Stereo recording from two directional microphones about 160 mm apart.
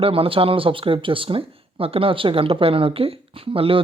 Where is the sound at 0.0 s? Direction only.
35° right (ahead or behind).